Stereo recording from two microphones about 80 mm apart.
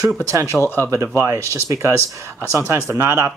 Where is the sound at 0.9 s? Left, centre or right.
Right.